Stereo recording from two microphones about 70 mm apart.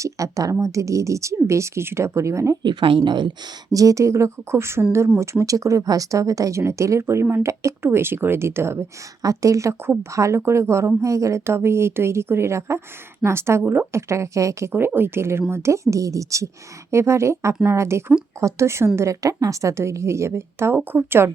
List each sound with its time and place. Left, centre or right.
0.0 s a woman's voice: right
2.6 s a woman's voice: right
3.7 s speech: right
9.2 s speech: right
9.8 s speech: right
10.1 s speech: right
14.7 s speech: right